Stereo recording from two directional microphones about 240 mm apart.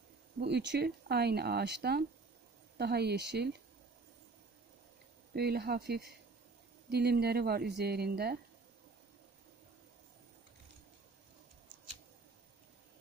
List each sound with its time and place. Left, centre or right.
0.4 s speech: right
5.3 s a woman's voice: right